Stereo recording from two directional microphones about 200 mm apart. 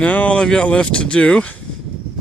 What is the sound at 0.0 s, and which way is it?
Speech, 5° left (ahead or behind).